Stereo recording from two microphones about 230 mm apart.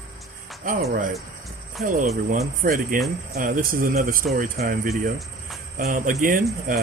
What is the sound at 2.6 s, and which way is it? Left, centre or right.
Speech, right.